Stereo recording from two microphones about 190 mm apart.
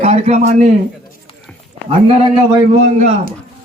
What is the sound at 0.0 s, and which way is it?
Speech, 35° right (ahead or behind).